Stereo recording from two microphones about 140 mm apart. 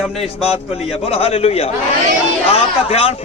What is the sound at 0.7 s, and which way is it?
Speech, 45° left (ahead or behind).